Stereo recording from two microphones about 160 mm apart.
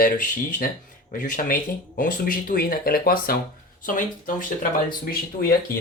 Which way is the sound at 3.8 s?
55° left (ahead or behind).